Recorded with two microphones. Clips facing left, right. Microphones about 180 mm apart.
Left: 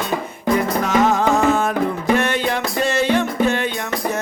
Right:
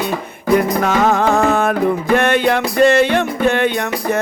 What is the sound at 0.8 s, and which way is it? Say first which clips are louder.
Music: right 2 dB; 60° right (ahead or behind).